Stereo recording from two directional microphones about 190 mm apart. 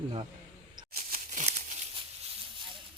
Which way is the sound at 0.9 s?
50° right (ahead or behind).